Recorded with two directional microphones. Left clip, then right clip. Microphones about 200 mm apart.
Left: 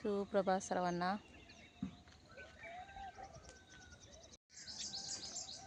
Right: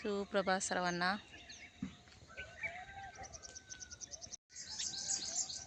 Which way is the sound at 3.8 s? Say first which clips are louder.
Right 8 dB; 30° left (ahead or behind).